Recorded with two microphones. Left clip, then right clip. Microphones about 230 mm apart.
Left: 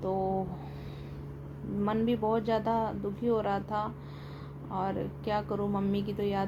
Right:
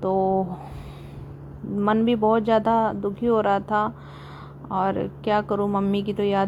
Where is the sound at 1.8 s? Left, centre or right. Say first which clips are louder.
Right 9 dB; right.